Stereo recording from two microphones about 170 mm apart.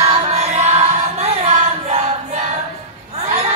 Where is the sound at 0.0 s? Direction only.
40° right (ahead or behind).